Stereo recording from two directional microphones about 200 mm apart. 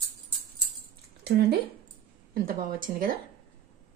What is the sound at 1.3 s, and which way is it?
A woman's voice, 50° right (ahead or behind).